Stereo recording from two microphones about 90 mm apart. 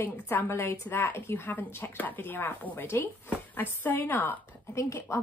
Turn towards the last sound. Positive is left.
turn(degrees=35)  # may be behind; listen again after turning